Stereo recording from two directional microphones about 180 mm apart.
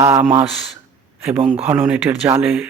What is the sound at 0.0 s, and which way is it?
Speech, 10° right (ahead or behind).